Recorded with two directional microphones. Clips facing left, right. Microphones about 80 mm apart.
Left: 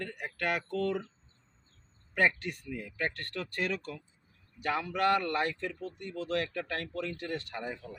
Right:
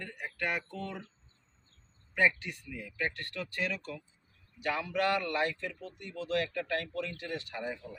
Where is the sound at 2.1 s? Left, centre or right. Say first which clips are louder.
Even; left.